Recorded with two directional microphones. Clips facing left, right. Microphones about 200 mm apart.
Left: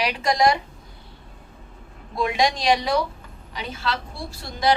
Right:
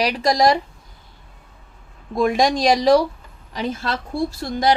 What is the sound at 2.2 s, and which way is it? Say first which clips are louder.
A woman's voice: right 5 dB; 45° right (ahead or behind).